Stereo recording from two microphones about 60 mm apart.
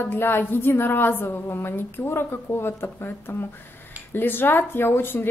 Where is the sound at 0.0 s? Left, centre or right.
Left.